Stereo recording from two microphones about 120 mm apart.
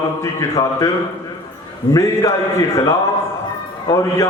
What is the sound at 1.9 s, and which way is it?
A man's voice, 25° left (ahead or behind).